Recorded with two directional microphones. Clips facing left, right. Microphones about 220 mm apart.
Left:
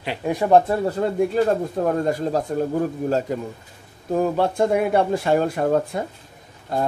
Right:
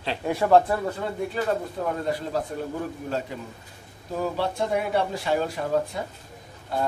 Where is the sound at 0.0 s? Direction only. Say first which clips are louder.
Left 2 dB; 15° left (ahead or behind).